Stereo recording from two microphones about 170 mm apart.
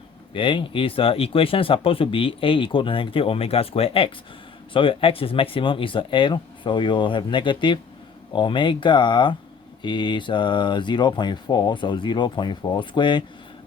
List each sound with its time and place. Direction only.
0.3 s speech: 30° left (ahead or behind)